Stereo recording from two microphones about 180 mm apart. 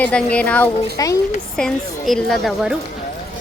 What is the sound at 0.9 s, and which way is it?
Speech, 20° left (ahead or behind).